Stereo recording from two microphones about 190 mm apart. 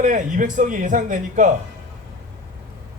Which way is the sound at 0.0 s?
40° right (ahead or behind).